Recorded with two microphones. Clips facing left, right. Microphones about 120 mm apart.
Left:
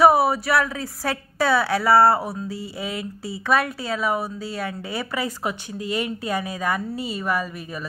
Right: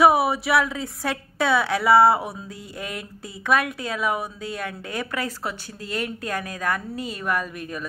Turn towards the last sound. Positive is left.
turn(degrees=5)  # may be behind; listen again after turning